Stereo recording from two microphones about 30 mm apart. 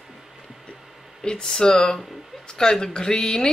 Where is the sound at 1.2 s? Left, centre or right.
Left.